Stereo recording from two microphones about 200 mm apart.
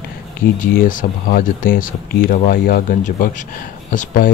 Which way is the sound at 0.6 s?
40° left (ahead or behind).